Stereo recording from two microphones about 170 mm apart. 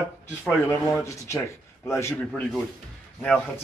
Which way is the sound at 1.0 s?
15° left (ahead or behind).